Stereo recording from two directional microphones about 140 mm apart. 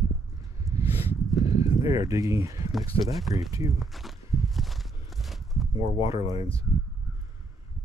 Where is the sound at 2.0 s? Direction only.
25° right (ahead or behind).